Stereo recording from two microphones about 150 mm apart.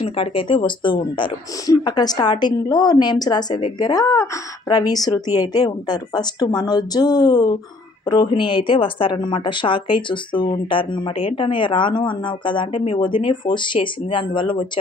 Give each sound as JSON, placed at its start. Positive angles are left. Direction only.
{"t": 0.0, "sound": "a woman's voice", "side_deg": 35}